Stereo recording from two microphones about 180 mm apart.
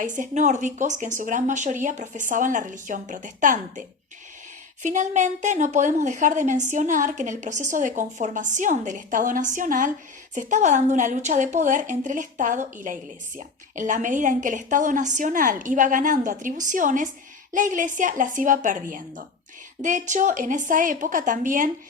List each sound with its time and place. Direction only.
0.2 s a woman's voice: 40° right (ahead or behind)